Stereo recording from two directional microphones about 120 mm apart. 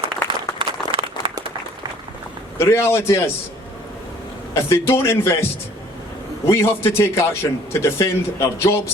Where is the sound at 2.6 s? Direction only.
20° left (ahead or behind).